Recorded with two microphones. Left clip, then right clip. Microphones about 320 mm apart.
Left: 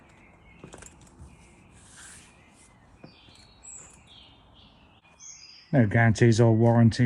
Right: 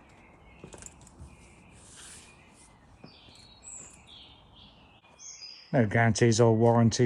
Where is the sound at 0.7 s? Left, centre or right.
Centre.